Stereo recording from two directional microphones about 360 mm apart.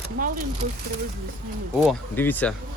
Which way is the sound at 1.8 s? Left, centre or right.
Centre.